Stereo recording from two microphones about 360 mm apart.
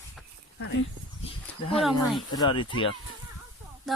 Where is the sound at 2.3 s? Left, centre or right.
Centre.